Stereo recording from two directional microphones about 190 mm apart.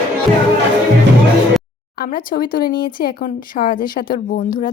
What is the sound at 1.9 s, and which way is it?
Speech, 50° left (ahead or behind).